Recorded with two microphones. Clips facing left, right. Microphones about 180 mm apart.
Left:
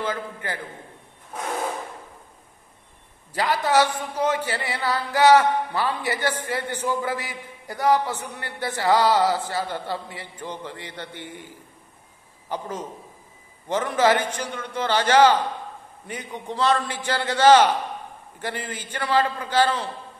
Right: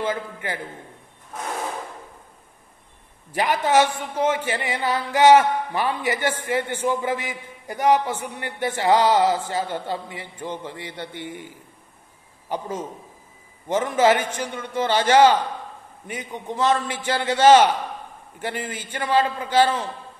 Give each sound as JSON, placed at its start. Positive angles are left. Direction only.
{"t": 0.0, "sound": "a man's voice", "side_deg": -20}
{"t": 3.7, "sound": "a man's voice", "side_deg": -20}